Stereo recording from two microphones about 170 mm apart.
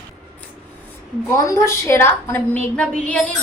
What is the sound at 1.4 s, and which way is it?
A woman's voice, 20° left (ahead or behind).